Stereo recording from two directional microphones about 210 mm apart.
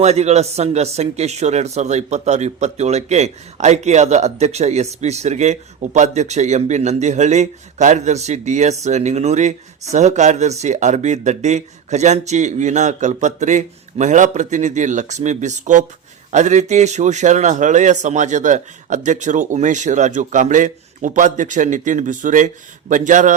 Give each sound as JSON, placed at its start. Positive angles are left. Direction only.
{"t": 0.0, "sound": "speech", "side_deg": -30}